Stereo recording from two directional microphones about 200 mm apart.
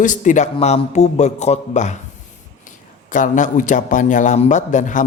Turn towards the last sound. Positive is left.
turn(degrees=40)  # may be behind; listen again after turning